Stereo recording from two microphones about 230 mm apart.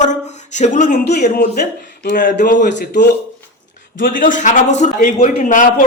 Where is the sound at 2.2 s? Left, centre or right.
Left.